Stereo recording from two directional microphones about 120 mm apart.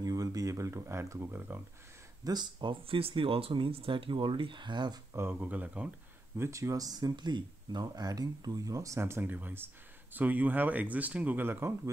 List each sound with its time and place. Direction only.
0.0 s speech: 30° right (ahead or behind)
2.2 s speech: 40° right (ahead or behind)
5.1 s speech: 20° right (ahead or behind)
6.3 s speech: 25° right (ahead or behind)